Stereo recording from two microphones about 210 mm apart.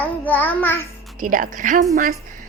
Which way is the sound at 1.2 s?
40° right (ahead or behind).